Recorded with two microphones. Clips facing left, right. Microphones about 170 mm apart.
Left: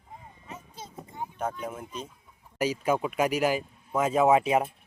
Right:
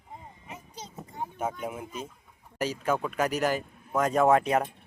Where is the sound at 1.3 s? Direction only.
5° right (ahead or behind).